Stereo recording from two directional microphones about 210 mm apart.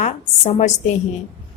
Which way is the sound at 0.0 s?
30° left (ahead or behind).